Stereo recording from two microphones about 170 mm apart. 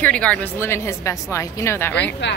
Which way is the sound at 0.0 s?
5° left (ahead or behind).